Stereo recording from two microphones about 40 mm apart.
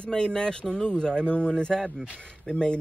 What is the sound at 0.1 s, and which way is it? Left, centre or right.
Speech, centre.